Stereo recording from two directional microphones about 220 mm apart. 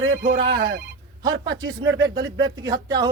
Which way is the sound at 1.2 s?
20° right (ahead or behind).